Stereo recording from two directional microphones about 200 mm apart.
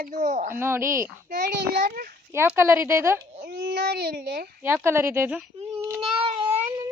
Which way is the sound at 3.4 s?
55° right (ahead or behind).